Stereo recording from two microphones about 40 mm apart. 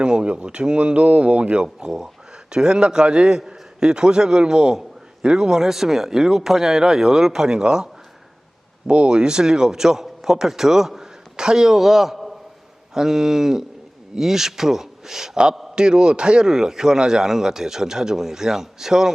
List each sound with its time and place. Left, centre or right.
0.0 s a man's voice: right
0.8 s speech: right
1.6 s a man's voice: centre
8.9 s a man's voice: right
15.7 s speech: right